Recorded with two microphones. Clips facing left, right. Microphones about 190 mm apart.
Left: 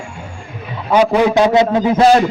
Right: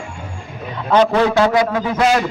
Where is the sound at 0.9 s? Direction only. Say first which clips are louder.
Left 2 dB; 10° left (ahead or behind); by 2.2 s 30° left (ahead or behind).